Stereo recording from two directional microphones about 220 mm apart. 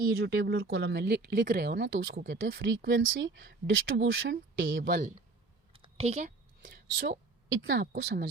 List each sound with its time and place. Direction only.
0.0 s speech: 45° right (ahead or behind)
5.7 s a sound: 25° right (ahead or behind)
7.5 s speech: 60° right (ahead or behind)
7.8 s speech: 45° right (ahead or behind)